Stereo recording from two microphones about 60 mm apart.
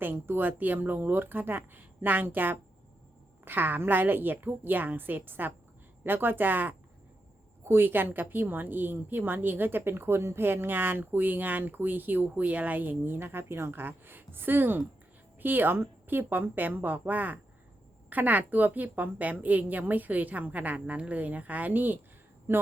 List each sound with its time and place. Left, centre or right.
0.0 s a woman's voice: right